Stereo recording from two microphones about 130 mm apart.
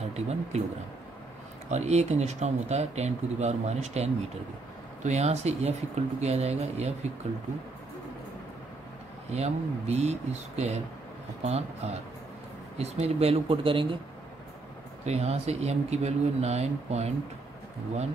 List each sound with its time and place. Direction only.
0.0 s speech: 55° right (ahead or behind)
1.7 s speech: 60° right (ahead or behind)
9.3 s speech: 55° right (ahead or behind)
15.0 s speech: 55° right (ahead or behind)